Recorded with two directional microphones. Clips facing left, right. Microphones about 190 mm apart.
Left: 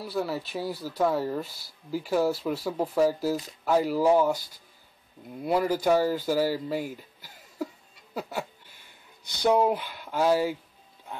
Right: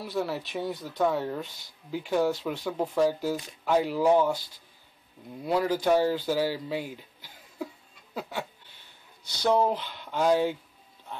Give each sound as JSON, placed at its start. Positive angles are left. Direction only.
{"t": 0.0, "sound": "speech", "side_deg": 0}
{"t": 5.4, "sound": "speech", "side_deg": 5}
{"t": 7.2, "sound": "a sound", "side_deg": 10}
{"t": 9.2, "sound": "speech", "side_deg": 15}